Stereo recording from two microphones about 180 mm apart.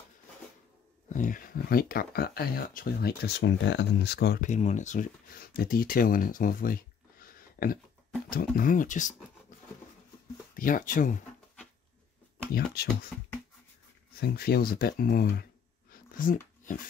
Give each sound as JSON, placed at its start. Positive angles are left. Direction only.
{"t": 1.0, "sound": "speech", "side_deg": 45}
{"t": 4.4, "sound": "speech", "side_deg": 40}
{"t": 10.5, "sound": "speech", "side_deg": 50}
{"t": 12.5, "sound": "speech", "side_deg": 60}
{"t": 14.2, "sound": "speech", "side_deg": 60}
{"t": 15.9, "sound": "dog", "side_deg": 50}